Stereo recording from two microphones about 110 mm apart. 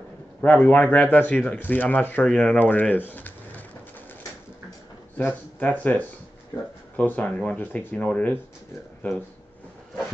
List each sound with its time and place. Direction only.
0.4 s speech: 15° left (ahead or behind)
5.6 s speech: 15° left (ahead or behind)